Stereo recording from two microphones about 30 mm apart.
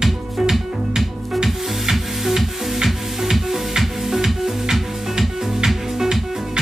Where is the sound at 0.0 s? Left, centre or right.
Centre.